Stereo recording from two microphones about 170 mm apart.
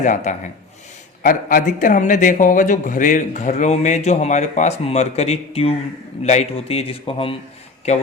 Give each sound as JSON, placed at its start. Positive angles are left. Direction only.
{"t": 0.0, "sound": "a man's voice", "side_deg": 45}